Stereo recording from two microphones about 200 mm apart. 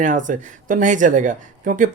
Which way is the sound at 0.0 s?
40° right (ahead or behind).